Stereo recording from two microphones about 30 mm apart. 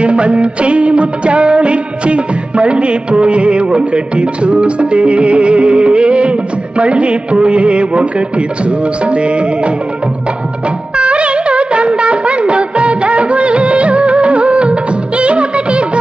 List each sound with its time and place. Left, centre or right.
0.0 s music: right
11.0 s music of bollywood: right